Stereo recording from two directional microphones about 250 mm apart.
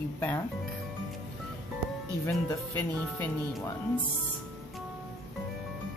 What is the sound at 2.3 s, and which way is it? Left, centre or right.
Speech, centre.